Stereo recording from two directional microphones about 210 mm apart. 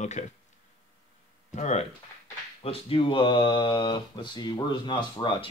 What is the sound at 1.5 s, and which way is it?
Speech, 35° left (ahead or behind).